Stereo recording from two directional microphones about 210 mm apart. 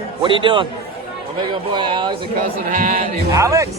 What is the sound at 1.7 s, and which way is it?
Speech, 20° right (ahead or behind).